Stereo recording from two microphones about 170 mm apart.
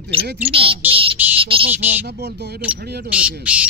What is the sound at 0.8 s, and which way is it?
Bird, 30° right (ahead or behind).